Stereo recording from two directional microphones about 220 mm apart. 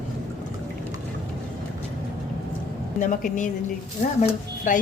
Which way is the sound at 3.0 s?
35° left (ahead or behind).